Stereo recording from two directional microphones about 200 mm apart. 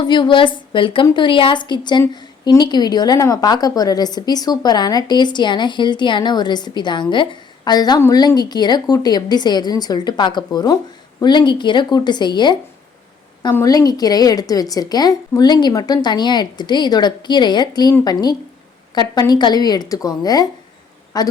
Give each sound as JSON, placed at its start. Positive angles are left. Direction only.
{"t": 0.0, "sound": "a woman's voice", "side_deg": 25}